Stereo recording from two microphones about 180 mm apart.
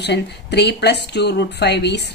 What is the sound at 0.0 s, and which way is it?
Speech, 70° left (ahead or behind).